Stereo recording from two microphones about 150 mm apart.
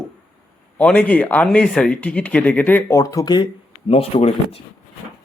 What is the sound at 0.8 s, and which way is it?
Speech, 10° left (ahead or behind).